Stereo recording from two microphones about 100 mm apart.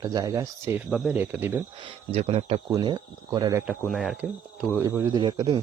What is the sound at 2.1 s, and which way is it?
Speech, 90° right.